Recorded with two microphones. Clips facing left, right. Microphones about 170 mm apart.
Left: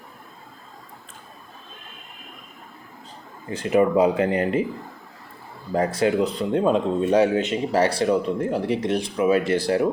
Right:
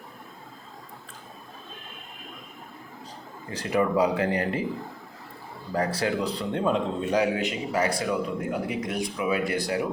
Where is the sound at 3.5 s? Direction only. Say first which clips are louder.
Left 5 dB; 20° left (ahead or behind).